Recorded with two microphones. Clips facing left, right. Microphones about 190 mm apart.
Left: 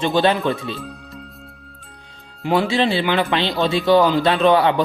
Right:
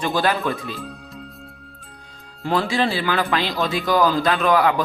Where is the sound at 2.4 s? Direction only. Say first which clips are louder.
Left 3 dB; 20° left (ahead or behind).